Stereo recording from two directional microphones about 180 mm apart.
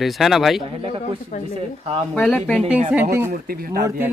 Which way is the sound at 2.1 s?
5° left (ahead or behind).